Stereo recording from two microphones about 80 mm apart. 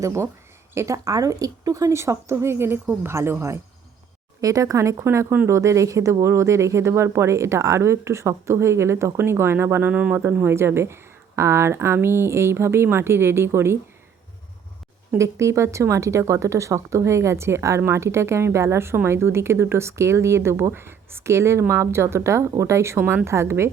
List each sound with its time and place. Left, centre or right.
0.0 s speech: right
4.4 s speech: right
9.9 s speech: centre
10.3 s a woman's voice: right
15.2 s speech: right